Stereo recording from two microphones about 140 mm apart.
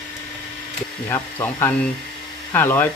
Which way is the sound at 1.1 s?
15° left (ahead or behind).